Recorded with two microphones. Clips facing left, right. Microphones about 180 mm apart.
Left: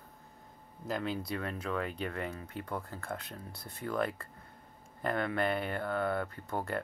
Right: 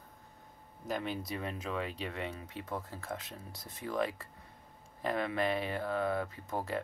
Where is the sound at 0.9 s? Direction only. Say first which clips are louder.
Left 2 dB; centre (ahead or behind).